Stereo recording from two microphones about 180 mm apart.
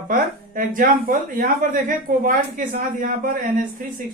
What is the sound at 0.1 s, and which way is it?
Speech, 50° right (ahead or behind).